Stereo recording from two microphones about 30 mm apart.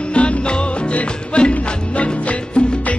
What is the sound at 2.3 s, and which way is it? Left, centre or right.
Music, left.